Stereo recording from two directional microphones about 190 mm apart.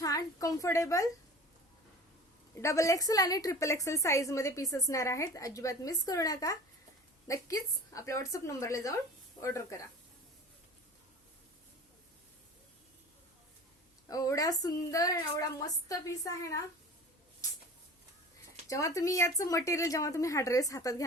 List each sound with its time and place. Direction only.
0.0 s a woman's voice: 20° left (ahead or behind)
2.6 s a woman's voice: 15° left (ahead or behind)
14.1 s a woman's voice: 15° left (ahead or behind)
18.7 s a woman's voice: 15° left (ahead or behind)